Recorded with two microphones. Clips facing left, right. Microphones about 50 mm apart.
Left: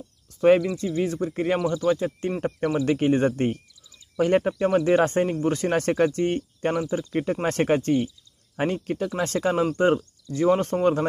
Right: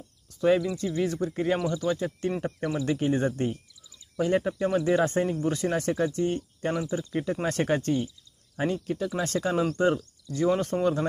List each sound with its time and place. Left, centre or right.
0.4 s speech: left
0.8 s speech: left
5.7 s speech: left
6.9 s speech: left